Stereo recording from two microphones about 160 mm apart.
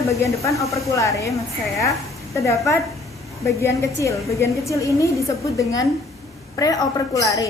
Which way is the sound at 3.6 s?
20° left (ahead or behind).